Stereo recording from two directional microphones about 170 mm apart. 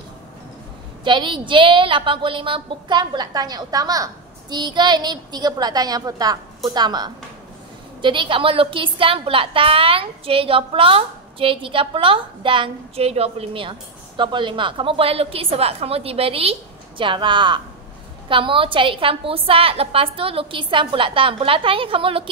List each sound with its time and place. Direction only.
1.0 s a woman's voice: 30° right (ahead or behind)